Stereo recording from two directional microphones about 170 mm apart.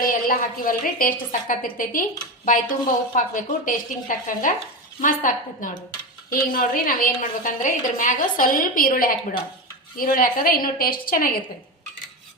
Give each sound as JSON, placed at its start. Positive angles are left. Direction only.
{"t": 0.0, "sound": "a woman's voice", "side_deg": 55}